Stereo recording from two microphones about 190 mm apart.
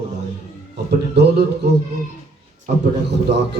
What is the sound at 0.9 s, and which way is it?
Speech, 60° right (ahead or behind).